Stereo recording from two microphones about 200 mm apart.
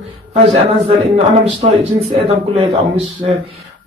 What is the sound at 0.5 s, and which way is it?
Speech, 30° right (ahead or behind).